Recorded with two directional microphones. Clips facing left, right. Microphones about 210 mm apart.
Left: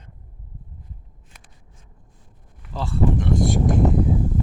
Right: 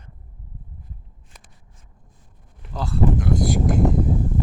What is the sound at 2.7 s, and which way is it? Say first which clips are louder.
Speech: even; centre (ahead or behind).